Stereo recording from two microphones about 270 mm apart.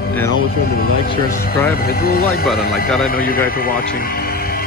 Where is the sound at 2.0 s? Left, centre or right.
Left.